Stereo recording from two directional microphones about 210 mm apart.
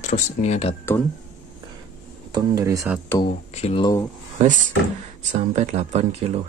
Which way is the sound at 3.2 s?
30° left (ahead or behind).